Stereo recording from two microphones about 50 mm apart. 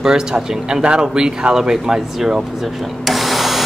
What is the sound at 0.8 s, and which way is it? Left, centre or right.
A man's voice, centre.